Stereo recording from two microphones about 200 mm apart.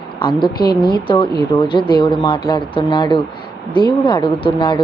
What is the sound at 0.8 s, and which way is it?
Speech, 25° left (ahead or behind).